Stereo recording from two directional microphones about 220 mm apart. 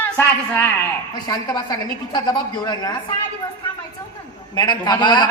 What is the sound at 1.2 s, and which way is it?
A man's voice, 20° left (ahead or behind).